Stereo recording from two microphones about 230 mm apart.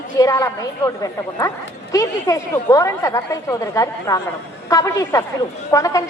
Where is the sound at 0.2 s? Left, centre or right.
Centre.